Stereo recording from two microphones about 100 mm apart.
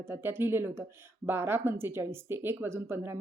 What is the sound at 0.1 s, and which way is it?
Speech, 20° right (ahead or behind).